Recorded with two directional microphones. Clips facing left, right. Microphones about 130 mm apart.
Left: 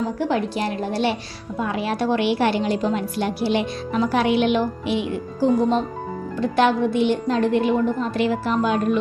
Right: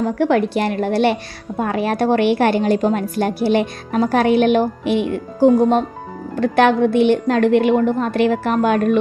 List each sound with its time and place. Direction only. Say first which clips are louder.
0.0 s a woman's voice: right 6 dB; 60° right (ahead or behind)
1.5 s a woman's voice: right 5 dB; 50° right (ahead or behind)